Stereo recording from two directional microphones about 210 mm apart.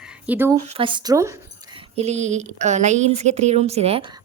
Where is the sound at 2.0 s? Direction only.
30° right (ahead or behind).